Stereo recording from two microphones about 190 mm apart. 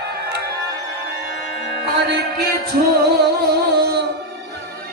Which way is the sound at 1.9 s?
60° right (ahead or behind).